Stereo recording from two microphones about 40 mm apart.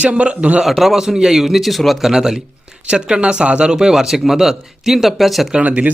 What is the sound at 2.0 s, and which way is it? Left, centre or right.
Speech, centre.